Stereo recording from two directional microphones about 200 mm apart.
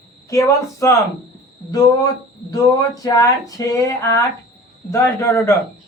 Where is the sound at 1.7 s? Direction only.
20° left (ahead or behind).